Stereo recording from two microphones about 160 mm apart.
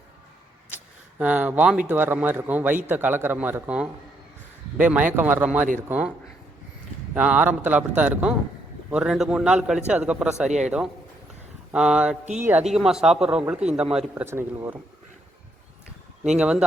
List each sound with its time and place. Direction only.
1.2 s a man's voice: 10° right (ahead or behind)
7.1 s a man's voice: 10° right (ahead or behind)
11.7 s a man's voice: 5° right (ahead or behind)
12.2 s speech: 45° right (ahead or behind)
12.5 s a man's voice: 5° right (ahead or behind)
16.2 s a man's voice: 5° right (ahead or behind)